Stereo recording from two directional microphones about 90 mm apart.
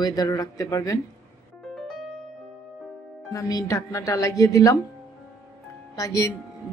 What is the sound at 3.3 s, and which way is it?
Speech, 40° left (ahead or behind).